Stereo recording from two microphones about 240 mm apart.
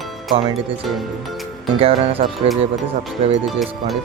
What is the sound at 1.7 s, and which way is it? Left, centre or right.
Speech, right.